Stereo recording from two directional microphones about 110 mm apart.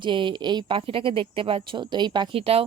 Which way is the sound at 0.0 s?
50° right (ahead or behind).